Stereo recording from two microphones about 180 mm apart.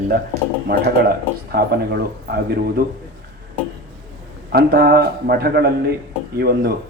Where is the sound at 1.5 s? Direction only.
60° right (ahead or behind).